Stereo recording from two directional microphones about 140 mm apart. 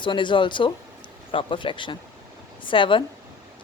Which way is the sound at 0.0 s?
35° left (ahead or behind).